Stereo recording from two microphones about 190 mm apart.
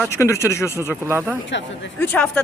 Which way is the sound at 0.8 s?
15° right (ahead or behind).